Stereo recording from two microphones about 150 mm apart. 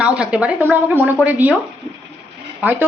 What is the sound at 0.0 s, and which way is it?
Speech, 5° right (ahead or behind).